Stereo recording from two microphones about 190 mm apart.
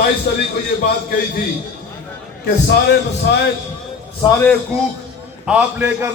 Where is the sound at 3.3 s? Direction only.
65° left (ahead or behind).